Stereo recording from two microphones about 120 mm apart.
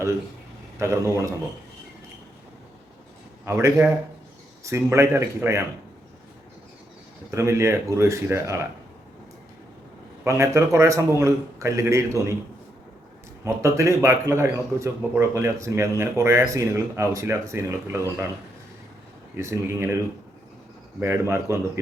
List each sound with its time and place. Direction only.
0.8 s a man's voice: 25° right (ahead or behind)
3.4 s a man's voice: 20° right (ahead or behind)
7.3 s a man's voice: 25° right (ahead or behind)
10.2 s a man's voice: 25° right (ahead or behind)
13.4 s a man's voice: 25° right (ahead or behind)
19.4 s a man's voice: 20° right (ahead or behind)
21.0 s a man's voice: 20° right (ahead or behind)